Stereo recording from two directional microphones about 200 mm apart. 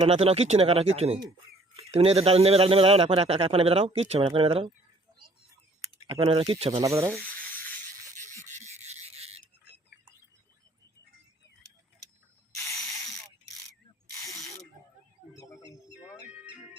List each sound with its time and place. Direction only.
0.0 s a man's voice: 30° right (ahead or behind)
6.1 s a man's voice: 25° right (ahead or behind)
6.8 s sanding: 15° right (ahead or behind)
7.1 s rub: centre (ahead or behind)
8.4 s filing: 35° right (ahead or behind)
12.6 s ratchet: 15° left (ahead or behind)
15.6 s music: 60° left (ahead or behind)